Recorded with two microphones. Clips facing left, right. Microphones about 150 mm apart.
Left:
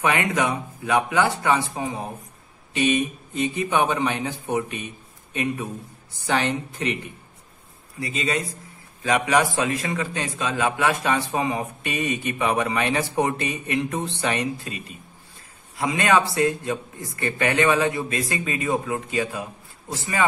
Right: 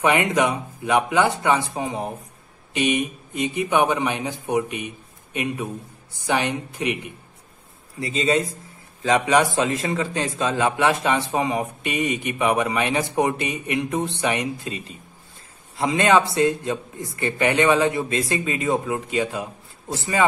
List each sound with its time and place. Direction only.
0.0 s a man's voice: 20° right (ahead or behind)
8.0 s a man's voice: 30° right (ahead or behind)
15.8 s a man's voice: 25° right (ahead or behind)